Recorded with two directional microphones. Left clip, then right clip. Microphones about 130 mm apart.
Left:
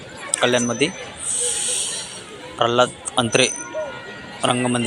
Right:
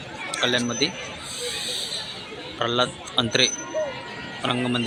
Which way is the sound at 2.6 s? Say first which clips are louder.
Left 6 dB; 20° left (ahead or behind).